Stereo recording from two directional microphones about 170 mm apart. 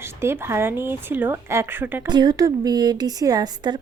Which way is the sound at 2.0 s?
25° right (ahead or behind).